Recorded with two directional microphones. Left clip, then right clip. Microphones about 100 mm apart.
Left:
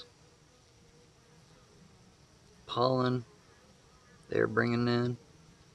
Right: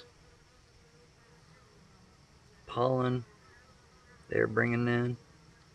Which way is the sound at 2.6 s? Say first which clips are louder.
Left 1 dB; 25° left (ahead or behind).